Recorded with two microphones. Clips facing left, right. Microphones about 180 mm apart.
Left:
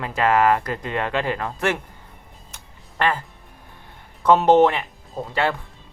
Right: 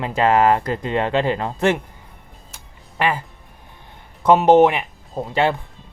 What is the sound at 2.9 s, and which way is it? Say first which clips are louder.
Speech: right 1 dB; 10° right (ahead or behind).